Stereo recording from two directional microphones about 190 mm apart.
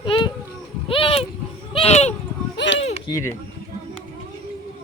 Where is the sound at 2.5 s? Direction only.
70° left (ahead or behind).